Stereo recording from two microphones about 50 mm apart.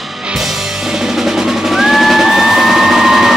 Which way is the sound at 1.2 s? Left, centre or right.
Centre.